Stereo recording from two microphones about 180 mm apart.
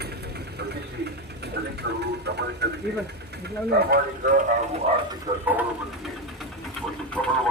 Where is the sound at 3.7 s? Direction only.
60° right (ahead or behind).